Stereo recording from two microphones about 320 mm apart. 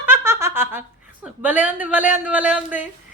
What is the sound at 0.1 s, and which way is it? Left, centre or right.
A woman's voice, centre.